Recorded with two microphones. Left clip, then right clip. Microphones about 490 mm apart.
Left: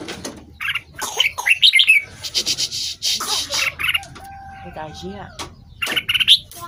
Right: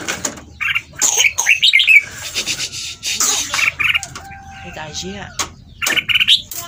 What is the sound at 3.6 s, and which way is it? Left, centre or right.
Frog, left.